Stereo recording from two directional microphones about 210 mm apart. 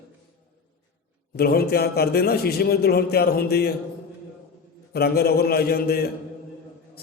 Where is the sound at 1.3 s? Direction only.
45° left (ahead or behind).